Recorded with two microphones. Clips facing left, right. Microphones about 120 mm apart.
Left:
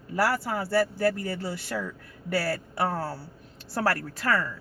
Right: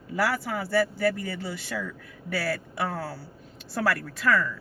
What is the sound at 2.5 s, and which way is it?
Speech, 35° left (ahead or behind).